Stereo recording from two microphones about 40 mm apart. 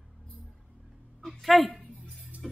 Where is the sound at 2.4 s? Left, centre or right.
Centre.